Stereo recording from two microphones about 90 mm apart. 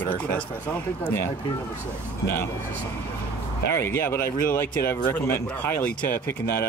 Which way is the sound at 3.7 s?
30° left (ahead or behind).